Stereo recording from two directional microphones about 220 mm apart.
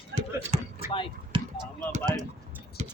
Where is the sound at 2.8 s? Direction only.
30° right (ahead or behind).